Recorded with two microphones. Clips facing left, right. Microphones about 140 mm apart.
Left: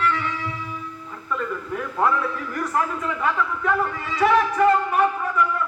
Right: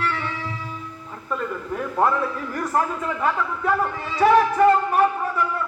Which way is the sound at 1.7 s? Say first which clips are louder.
Right 1 dB; 30° right (ahead or behind).